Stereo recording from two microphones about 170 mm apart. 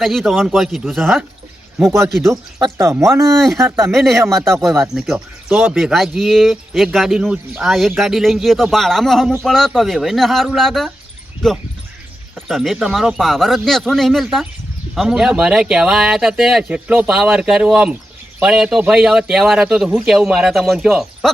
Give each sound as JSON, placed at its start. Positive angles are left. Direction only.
{"t": 0.0, "sound": "speech", "side_deg": 0}
{"t": 1.8, "sound": "speech", "side_deg": -15}
{"t": 3.3, "sound": "speech", "side_deg": 0}